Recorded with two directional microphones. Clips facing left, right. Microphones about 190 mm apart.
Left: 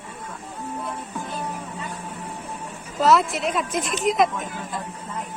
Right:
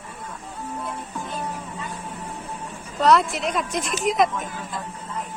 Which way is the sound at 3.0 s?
Centre (ahead or behind).